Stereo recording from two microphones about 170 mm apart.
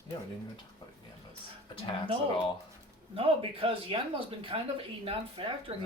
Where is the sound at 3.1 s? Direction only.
35° right (ahead or behind).